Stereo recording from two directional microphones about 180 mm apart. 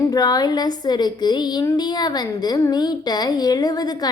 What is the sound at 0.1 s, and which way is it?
A woman's voice, 20° left (ahead or behind).